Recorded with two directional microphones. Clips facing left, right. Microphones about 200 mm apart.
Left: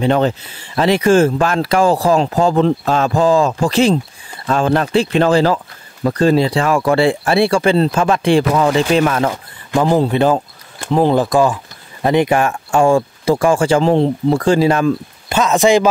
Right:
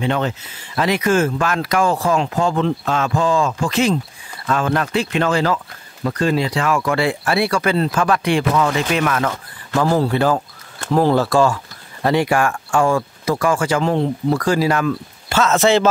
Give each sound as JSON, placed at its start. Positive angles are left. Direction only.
{"t": 0.0, "sound": "speech", "side_deg": 35}
{"t": 9.3, "sound": "speech", "side_deg": 15}